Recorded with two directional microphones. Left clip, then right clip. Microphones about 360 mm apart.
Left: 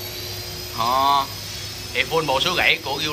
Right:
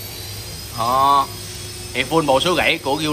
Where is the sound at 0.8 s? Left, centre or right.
Centre.